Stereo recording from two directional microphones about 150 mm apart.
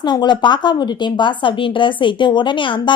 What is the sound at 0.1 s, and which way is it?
A woman's voice, 30° left (ahead or behind).